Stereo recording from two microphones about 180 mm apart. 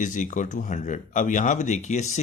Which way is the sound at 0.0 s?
45° left (ahead or behind).